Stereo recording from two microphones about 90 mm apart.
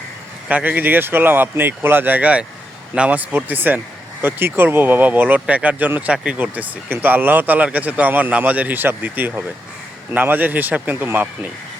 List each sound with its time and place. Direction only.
0.4 s speech: 15° right (ahead or behind)